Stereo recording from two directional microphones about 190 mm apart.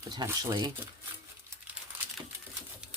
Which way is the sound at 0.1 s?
20° right (ahead or behind).